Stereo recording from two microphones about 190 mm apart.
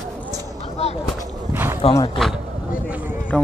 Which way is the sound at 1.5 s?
10° right (ahead or behind).